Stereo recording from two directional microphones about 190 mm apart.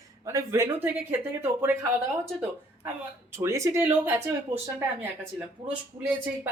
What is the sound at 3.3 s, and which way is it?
Speech, 15° right (ahead or behind).